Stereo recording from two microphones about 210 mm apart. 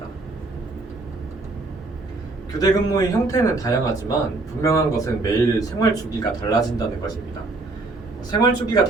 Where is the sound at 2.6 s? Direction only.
15° left (ahead or behind).